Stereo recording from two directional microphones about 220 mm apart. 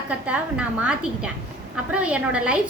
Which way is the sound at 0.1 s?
5° right (ahead or behind).